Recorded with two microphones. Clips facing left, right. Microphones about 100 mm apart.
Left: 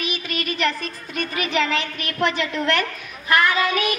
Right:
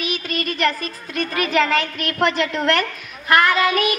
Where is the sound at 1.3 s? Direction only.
45° right (ahead or behind).